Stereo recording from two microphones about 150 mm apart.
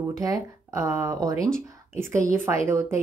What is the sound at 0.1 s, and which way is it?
Speech, 25° right (ahead or behind).